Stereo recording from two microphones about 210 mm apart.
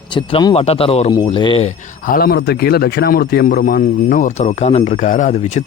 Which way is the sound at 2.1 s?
45° left (ahead or behind).